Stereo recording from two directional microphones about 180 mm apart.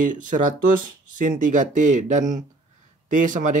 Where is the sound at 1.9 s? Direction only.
45° right (ahead or behind).